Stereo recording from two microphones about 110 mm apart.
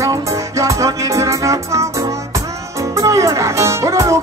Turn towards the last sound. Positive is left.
turn(degrees=-30)  # may be behind; listen again after turning